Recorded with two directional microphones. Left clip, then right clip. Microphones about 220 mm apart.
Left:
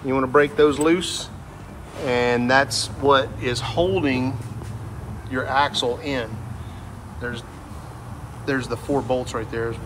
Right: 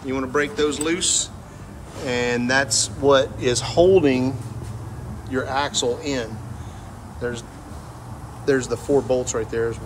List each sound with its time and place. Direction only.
0.0 s speech: 5° right (ahead or behind); by 4.3 s 20° right (ahead or behind)
5.3 s speech: 15° right (ahead or behind)
8.5 s speech: 15° right (ahead or behind)